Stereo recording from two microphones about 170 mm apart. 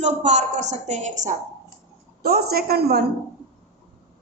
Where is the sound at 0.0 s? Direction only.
40° right (ahead or behind).